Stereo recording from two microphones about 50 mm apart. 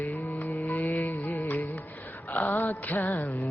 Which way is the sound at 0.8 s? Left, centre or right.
Left.